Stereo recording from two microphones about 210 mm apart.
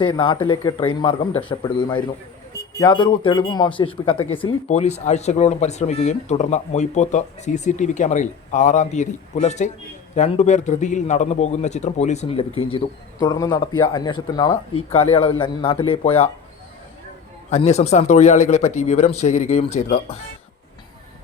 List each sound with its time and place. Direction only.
0.0 s speech: 20° left (ahead or behind)
17.5 s speech: 30° left (ahead or behind)